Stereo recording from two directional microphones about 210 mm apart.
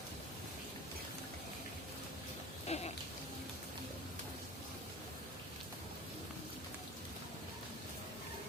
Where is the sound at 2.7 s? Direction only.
30° left (ahead or behind).